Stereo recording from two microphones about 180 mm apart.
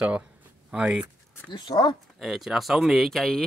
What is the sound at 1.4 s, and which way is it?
Speech, 25° left (ahead or behind).